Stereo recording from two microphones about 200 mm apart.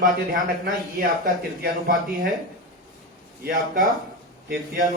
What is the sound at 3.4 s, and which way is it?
Speech, 40° right (ahead or behind).